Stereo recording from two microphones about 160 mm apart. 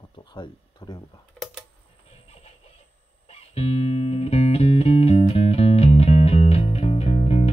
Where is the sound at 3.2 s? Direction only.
40° left (ahead or behind).